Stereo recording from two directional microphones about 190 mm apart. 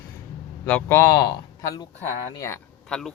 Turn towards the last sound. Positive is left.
turn(degrees=0)  # may be behind; listen again after turning